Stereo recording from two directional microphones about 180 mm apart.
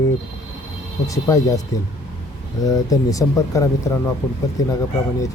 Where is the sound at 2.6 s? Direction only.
20° left (ahead or behind).